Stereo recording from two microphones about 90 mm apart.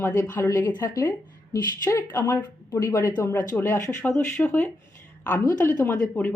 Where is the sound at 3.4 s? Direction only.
20° left (ahead or behind).